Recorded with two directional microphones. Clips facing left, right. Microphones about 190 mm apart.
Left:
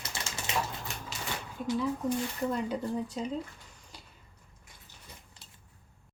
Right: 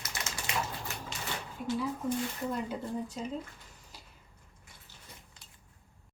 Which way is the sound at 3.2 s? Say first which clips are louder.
Left 3 dB; centre (ahead or behind).